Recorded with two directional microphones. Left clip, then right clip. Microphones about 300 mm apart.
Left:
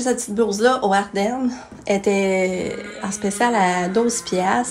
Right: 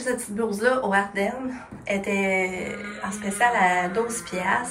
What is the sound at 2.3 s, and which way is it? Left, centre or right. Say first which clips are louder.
Speech: left 4 dB; left.